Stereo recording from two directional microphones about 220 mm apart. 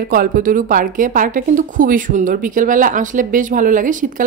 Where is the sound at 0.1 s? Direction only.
40° right (ahead or behind).